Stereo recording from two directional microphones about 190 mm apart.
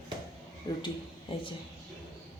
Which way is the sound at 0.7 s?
20° left (ahead or behind).